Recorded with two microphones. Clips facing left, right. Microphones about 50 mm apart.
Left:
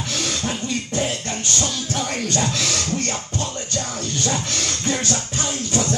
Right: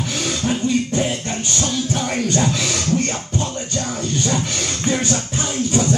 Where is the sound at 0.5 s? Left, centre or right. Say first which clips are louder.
Right 6 dB; centre.